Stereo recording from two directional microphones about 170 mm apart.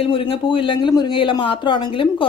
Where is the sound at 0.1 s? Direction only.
30° left (ahead or behind).